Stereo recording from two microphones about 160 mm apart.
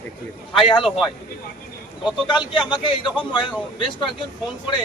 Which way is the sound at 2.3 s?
30° left (ahead or behind).